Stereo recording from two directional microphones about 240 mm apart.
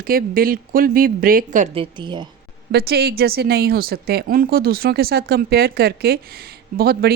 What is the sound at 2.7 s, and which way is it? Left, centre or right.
Speech, right.